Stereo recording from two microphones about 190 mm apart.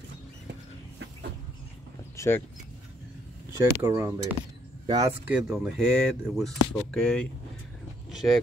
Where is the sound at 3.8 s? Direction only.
15° right (ahead or behind).